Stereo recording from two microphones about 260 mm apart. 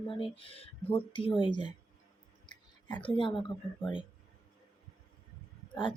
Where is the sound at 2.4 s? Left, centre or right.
Centre.